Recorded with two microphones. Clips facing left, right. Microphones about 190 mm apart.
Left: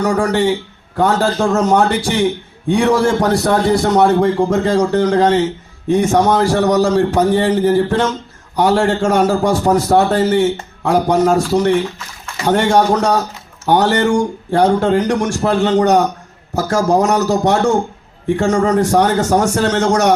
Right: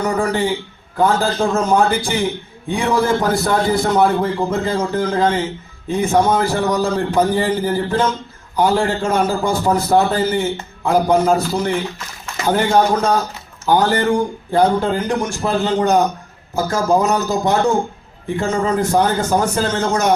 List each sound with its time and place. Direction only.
0.0 s speech: 75° left (ahead or behind)